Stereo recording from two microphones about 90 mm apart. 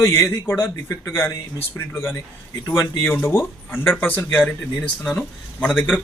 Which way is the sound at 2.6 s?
40° left (ahead or behind).